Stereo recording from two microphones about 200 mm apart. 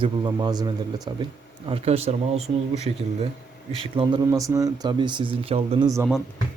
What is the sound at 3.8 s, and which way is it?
Speech, 25° right (ahead or behind).